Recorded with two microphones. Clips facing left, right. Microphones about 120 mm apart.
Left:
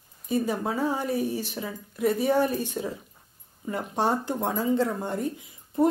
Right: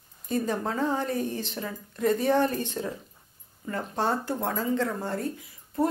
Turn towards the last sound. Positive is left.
turn(degrees=20)  # may be behind; listen again after turning